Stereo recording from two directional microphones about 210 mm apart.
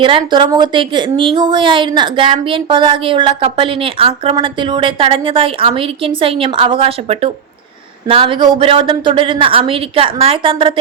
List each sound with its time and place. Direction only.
0.0 s a woman's voice: 25° right (ahead or behind)